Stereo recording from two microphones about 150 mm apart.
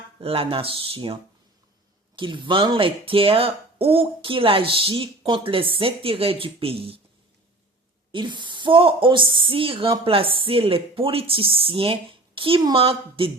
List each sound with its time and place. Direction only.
0.2 s speech: 40° right (ahead or behind)
8.1 s speech: 30° right (ahead or behind)